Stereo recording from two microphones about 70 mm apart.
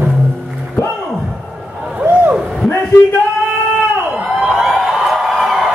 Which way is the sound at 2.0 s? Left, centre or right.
Right.